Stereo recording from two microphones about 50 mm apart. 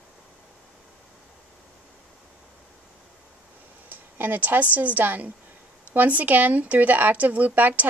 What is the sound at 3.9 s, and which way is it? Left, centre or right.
Speech, right.